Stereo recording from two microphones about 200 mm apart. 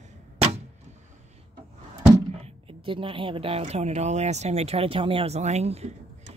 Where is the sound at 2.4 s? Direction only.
25° right (ahead or behind).